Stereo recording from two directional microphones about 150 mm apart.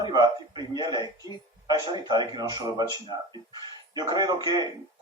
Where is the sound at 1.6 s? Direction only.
30° right (ahead or behind).